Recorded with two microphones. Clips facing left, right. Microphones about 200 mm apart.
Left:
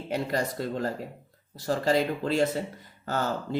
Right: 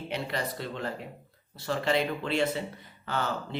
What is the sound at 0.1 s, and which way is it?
Speech, 45° left (ahead or behind).